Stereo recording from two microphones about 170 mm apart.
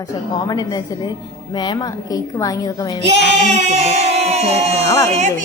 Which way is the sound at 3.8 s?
40° right (ahead or behind).